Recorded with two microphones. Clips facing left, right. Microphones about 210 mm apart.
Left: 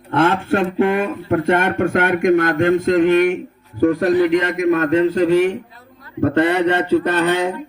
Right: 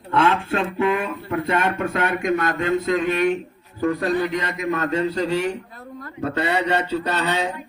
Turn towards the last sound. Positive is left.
turn(degrees=55)  # may be behind; listen again after turning